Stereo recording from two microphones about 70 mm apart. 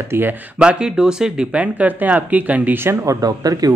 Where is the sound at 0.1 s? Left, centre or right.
Right.